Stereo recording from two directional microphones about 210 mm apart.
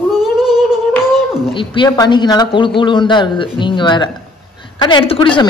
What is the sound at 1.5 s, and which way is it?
A man's voice, 25° left (ahead or behind).